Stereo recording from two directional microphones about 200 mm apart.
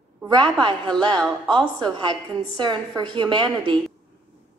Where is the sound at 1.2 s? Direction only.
5° left (ahead or behind).